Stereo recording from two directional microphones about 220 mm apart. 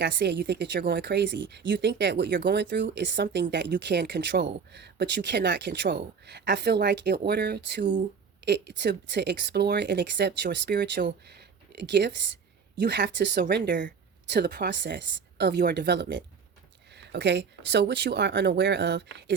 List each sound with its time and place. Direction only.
0.0 s speech: 50° right (ahead or behind)